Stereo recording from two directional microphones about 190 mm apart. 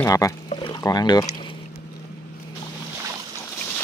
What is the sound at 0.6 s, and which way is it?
Rowboat, 20° left (ahead or behind).